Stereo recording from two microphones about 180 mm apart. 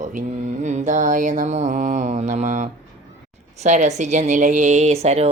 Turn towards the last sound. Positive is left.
turn(degrees=-35)  # may be behind; listen again after turning